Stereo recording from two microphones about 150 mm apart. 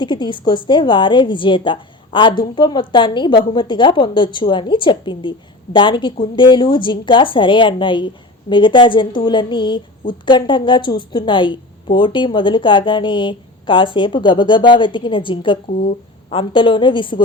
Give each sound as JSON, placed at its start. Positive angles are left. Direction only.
{"t": 0.0, "sound": "speech", "side_deg": 30}